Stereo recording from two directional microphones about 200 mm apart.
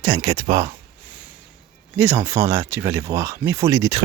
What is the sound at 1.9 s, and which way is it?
Speech, 10° right (ahead or behind).